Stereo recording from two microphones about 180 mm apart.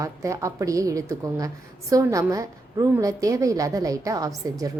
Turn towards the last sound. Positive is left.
turn(degrees=-20)  # may be behind; listen again after turning